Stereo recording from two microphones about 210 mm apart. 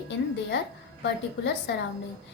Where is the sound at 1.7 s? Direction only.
55° left (ahead or behind).